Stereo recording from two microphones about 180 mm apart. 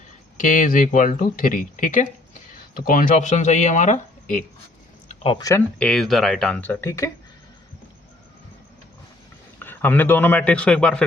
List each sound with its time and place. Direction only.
0.3 s speech: 45° left (ahead or behind)
5.0 s speech: 30° left (ahead or behind)
5.8 s speech: centre (ahead or behind)
9.6 s a man's voice: 10° left (ahead or behind)